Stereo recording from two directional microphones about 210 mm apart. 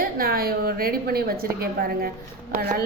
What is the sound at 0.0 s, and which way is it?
A woman's voice, 45° right (ahead or behind).